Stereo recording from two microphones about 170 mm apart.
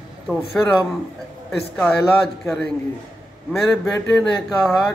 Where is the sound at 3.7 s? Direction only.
Centre (ahead or behind).